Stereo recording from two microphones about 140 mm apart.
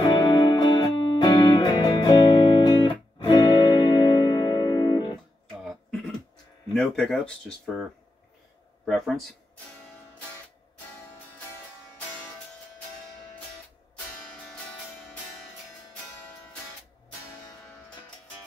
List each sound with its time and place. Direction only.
0.0 s music: 30° left (ahead or behind)
5.7 s a sound: 5° left (ahead or behind)
6.7 s speech: 5° left (ahead or behind)
14.4 s music: 5° left (ahead or behind)